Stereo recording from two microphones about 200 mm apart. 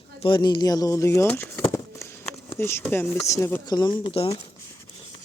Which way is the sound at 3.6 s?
20° left (ahead or behind).